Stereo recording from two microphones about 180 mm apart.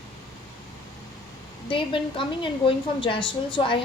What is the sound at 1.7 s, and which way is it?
A woman's voice, 30° left (ahead or behind).